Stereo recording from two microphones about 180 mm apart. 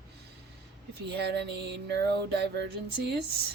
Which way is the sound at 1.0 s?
65° right (ahead or behind).